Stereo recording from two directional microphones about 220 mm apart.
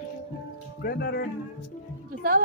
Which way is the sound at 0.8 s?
45° left (ahead or behind).